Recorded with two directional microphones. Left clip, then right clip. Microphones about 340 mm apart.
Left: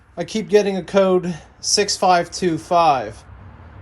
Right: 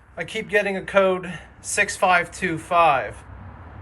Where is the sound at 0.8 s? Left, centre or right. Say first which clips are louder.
Left 3 dB; centre.